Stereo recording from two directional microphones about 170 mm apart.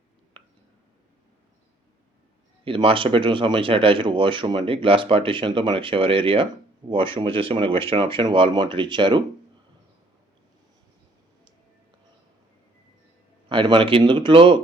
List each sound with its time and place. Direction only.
2.6 s speech: 30° right (ahead or behind)
13.5 s speech: 30° right (ahead or behind)